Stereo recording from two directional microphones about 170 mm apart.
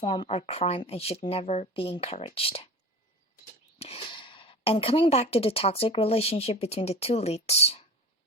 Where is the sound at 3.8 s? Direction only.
35° left (ahead or behind).